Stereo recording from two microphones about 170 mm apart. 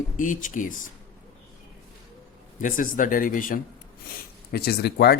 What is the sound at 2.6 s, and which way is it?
Speech, 50° left (ahead or behind).